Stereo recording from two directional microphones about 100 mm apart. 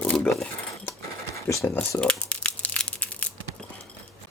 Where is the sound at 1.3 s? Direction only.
30° left (ahead or behind).